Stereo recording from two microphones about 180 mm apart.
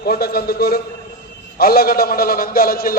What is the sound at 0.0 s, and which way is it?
A man's voice, 60° left (ahead or behind).